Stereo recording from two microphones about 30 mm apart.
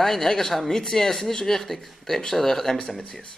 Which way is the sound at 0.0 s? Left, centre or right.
Centre.